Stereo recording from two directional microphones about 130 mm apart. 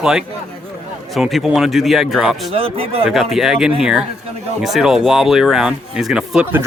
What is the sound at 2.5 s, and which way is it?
Speech, 45° right (ahead or behind).